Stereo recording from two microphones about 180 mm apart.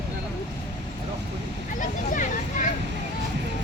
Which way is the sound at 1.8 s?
45° left (ahead or behind).